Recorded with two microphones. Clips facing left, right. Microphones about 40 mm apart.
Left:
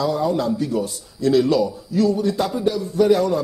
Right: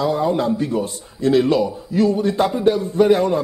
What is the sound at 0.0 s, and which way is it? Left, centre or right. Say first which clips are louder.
A man's voice: right 2 dB; right.